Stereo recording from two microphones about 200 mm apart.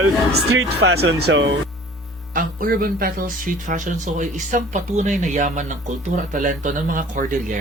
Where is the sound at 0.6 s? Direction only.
55° right (ahead or behind).